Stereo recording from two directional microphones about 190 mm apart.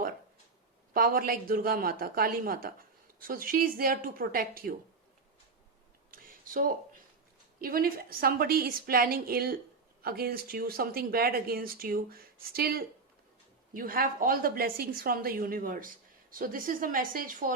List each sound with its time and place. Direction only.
0.9 s a woman's voice: 50° right (ahead or behind)
6.1 s a sound: 50° right (ahead or behind)
7.6 s a woman's voice: 50° right (ahead or behind)